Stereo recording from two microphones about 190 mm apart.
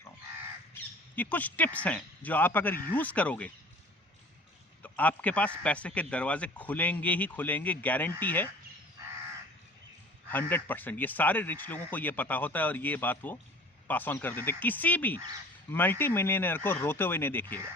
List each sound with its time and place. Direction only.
0.7 s speech: 10° left (ahead or behind)
4.8 s speech: 10° left (ahead or behind)
10.5 s speech: 10° left (ahead or behind)